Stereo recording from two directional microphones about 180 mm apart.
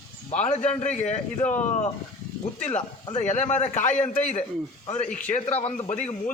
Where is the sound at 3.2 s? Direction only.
40° left (ahead or behind).